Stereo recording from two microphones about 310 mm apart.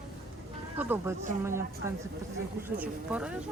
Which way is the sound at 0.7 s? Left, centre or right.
Centre.